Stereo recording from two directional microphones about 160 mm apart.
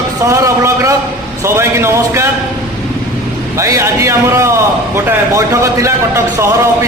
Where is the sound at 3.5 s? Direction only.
20° right (ahead or behind).